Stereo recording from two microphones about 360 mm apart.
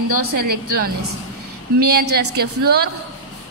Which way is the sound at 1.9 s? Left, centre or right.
Right.